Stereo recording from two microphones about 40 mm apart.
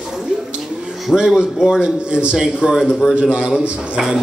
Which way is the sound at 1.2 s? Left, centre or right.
Centre.